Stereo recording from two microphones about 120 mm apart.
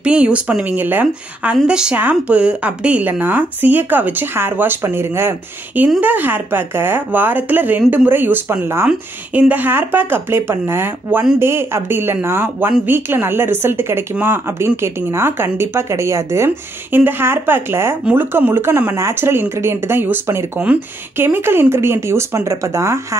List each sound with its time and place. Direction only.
0.0 s speech: 10° right (ahead or behind); by 22.9 s 25° right (ahead or behind)